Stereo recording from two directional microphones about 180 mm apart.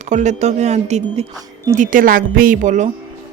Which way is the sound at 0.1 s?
40° right (ahead or behind).